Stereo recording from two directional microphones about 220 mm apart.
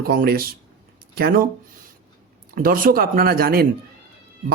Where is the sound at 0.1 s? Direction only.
40° right (ahead or behind).